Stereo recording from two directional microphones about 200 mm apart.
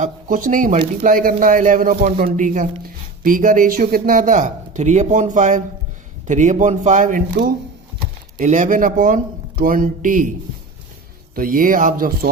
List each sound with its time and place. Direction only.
0.0 s speech: 40° right (ahead or behind)
11.3 s speech: 45° right (ahead or behind)